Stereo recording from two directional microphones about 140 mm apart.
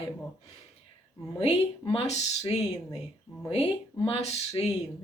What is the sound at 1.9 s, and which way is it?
Speech, 50° left (ahead or behind).